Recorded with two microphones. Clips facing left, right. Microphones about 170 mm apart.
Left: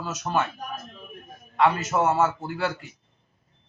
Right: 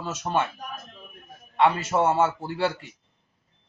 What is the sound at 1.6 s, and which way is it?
A man's voice, 30° right (ahead or behind).